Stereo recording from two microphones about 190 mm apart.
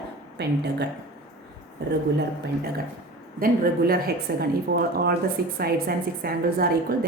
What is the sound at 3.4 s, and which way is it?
A woman's voice, 50° right (ahead or behind).